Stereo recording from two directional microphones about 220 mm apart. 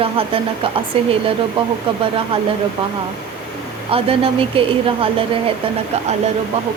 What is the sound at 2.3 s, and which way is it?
Speech, 25° right (ahead or behind).